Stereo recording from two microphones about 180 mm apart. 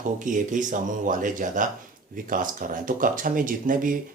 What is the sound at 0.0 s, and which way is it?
Speech, 45° right (ahead or behind).